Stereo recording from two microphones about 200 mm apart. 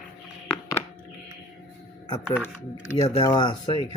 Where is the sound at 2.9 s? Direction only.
30° left (ahead or behind).